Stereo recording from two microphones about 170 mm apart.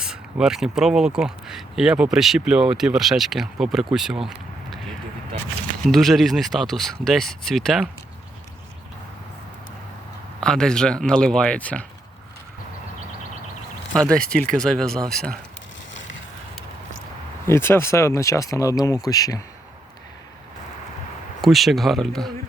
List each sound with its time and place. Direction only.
0.0 s speech: 5° right (ahead or behind)
5.8 s speech: centre (ahead or behind)
10.4 s speech: 5° left (ahead or behind)
13.9 s speech: 5° left (ahead or behind)
17.4 s speech: 15° left (ahead or behind)
21.4 s speech: centre (ahead or behind)